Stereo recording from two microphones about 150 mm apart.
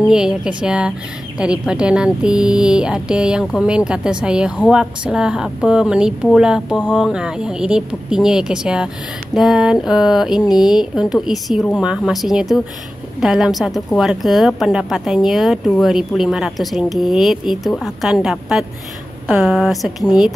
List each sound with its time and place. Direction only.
0.1 s speech: 5° right (ahead or behind)